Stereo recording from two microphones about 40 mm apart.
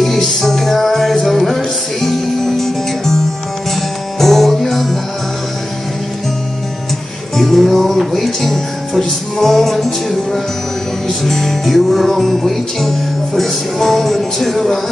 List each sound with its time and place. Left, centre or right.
0.0 s music: centre
7.3 s music: centre